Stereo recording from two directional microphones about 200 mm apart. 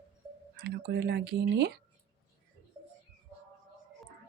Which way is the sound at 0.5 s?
55° right (ahead or behind).